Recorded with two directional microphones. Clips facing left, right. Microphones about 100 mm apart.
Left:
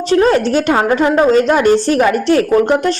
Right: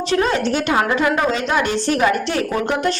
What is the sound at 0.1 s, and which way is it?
A woman's voice, 40° left (ahead or behind).